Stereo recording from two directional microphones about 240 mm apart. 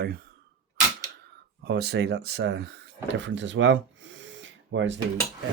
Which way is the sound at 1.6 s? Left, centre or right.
Right.